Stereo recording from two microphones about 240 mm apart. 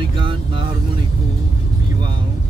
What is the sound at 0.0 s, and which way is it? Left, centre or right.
Vehicle, right.